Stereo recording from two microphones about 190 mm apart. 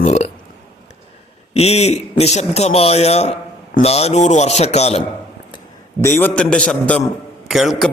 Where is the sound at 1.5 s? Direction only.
35° left (ahead or behind).